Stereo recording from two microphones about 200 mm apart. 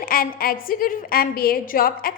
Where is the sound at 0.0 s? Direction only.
45° left (ahead or behind).